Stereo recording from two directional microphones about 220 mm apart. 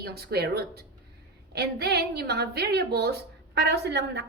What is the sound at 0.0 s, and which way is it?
A woman's voice, 45° right (ahead or behind).